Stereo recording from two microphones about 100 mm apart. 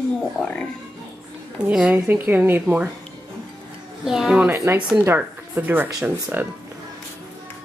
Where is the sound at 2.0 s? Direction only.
20° right (ahead or behind).